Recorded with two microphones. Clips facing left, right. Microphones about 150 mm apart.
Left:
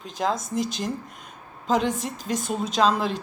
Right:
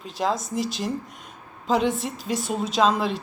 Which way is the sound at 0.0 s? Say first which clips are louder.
Right 1 dB; centre (ahead or behind).